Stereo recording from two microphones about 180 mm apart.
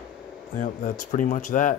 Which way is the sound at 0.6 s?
45° left (ahead or behind).